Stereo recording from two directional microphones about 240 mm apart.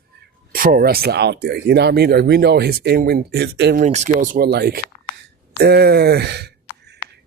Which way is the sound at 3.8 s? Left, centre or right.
Right.